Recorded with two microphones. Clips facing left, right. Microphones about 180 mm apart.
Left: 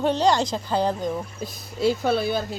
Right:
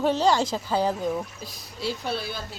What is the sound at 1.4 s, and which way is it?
Speech, 50° left (ahead or behind).